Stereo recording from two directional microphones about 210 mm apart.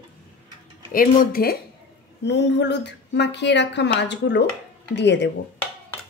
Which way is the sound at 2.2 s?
55° left (ahead or behind).